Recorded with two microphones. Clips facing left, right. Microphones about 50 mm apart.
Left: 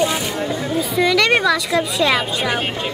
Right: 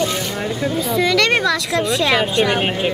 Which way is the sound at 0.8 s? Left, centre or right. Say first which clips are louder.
Left 1 dB; centre.